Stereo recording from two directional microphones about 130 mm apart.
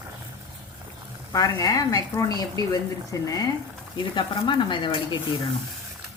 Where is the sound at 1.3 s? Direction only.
25° left (ahead or behind).